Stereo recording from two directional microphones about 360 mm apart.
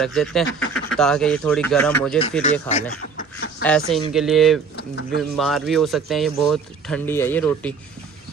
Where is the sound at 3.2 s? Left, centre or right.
Left.